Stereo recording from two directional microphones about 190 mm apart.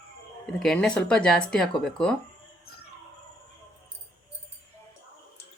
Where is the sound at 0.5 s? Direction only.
Centre (ahead or behind).